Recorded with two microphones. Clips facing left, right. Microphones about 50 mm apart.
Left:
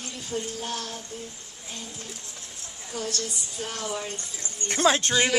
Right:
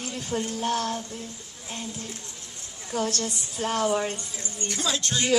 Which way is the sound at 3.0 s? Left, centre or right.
Right.